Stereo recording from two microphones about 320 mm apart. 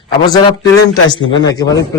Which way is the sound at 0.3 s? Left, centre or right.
Centre.